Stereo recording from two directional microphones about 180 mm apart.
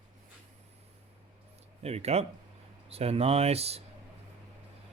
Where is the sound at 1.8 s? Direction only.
35° right (ahead or behind).